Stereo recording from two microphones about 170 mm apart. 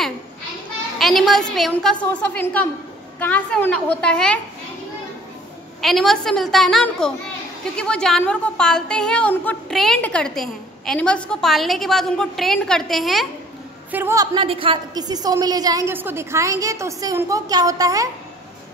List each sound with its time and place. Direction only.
0.9 s a woman's voice: centre (ahead or behind)
5.8 s a woman's voice: centre (ahead or behind)
13.9 s a woman's voice: 15° right (ahead or behind)